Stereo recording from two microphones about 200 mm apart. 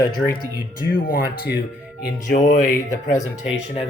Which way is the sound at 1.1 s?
45° left (ahead or behind).